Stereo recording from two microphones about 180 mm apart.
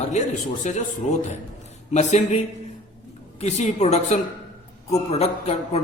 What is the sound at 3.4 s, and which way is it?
A man's voice, 40° left (ahead or behind).